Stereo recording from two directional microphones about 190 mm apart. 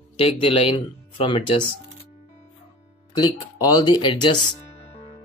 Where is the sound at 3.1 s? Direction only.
20° left (ahead or behind).